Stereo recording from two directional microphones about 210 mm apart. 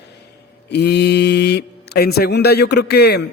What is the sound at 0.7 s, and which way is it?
Speech, 50° left (ahead or behind).